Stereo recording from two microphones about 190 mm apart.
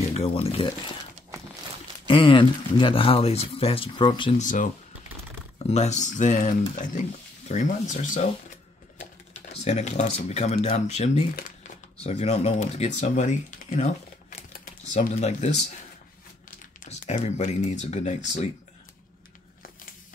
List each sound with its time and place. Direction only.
0.1 s speech: 30° left (ahead or behind)
2.0 s speech: 25° left (ahead or behind)
4.4 s speech: 45° left (ahead or behind)
5.7 s speech: 35° left (ahead or behind)
8.9 s typing: 35° left (ahead or behind)
12.0 s speech: 35° left (ahead or behind)
17.0 s speech: 40° left (ahead or behind)